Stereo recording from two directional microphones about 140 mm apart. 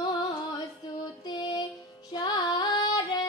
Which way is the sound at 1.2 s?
30° left (ahead or behind).